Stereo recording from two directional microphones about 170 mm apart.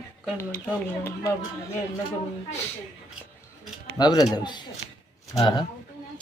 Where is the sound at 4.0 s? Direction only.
25° left (ahead or behind).